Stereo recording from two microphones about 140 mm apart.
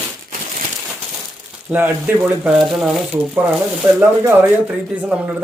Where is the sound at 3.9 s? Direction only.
15° right (ahead or behind).